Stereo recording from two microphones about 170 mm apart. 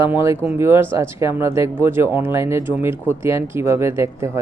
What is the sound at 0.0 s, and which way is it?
Speech, 15° right (ahead or behind).